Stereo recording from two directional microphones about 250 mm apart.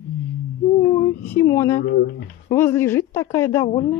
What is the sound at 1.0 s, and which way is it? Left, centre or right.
A woman's voice, centre.